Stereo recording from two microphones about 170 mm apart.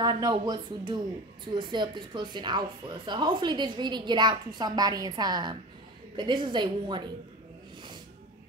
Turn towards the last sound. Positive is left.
turn(degrees=-25)  # may be behind; listen again after turning